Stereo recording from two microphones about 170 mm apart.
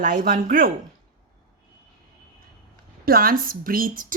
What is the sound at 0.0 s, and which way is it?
Speech, 55° right (ahead or behind).